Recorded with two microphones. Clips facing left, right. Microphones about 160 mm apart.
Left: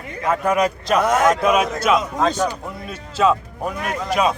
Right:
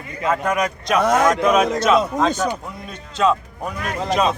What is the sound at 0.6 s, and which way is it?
A man's voice, 10° left (ahead or behind).